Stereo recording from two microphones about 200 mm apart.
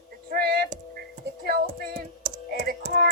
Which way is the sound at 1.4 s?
50° right (ahead or behind).